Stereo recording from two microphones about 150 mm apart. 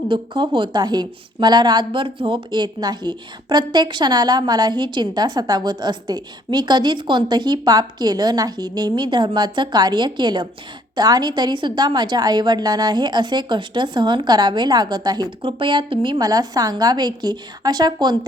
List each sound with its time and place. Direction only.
0.1 s a woman's voice: 30° right (ahead or behind)